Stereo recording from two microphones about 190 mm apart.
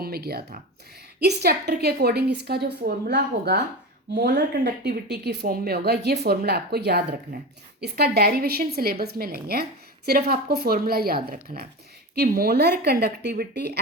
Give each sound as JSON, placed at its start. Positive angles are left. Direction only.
{"t": 0.0, "sound": "a woman's voice", "side_deg": -55}